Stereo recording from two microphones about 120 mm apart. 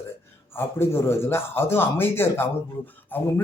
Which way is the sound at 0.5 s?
20° left (ahead or behind).